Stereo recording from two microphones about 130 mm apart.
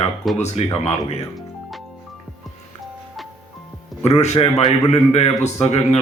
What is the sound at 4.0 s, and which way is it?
Speech, 60° left (ahead or behind).